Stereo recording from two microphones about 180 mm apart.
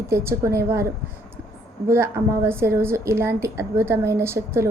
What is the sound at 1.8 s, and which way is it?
A woman's voice, 15° right (ahead or behind).